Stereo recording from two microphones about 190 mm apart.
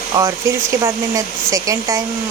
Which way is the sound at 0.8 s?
15° right (ahead or behind).